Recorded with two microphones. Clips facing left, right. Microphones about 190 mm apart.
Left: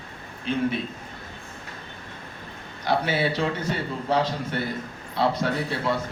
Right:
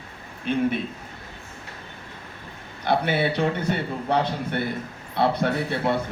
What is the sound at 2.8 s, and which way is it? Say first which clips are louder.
A man's voice: right 1 dB; 55° right (ahead or behind).